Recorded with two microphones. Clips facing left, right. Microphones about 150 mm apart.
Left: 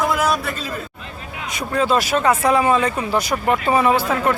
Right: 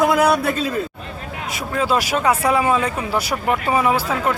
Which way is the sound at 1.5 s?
5° right (ahead or behind).